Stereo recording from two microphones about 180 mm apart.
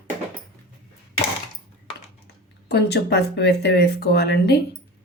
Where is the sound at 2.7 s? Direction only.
70° left (ahead or behind).